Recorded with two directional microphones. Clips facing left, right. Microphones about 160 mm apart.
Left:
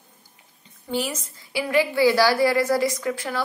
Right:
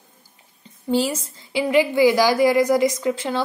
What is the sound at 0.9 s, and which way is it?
A woman's voice, 30° right (ahead or behind).